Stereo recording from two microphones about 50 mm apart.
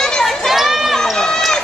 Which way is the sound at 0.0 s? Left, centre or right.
Centre.